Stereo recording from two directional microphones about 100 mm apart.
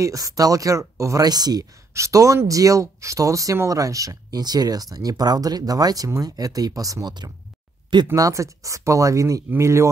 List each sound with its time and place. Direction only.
0.0 s speech: 35° right (ahead or behind)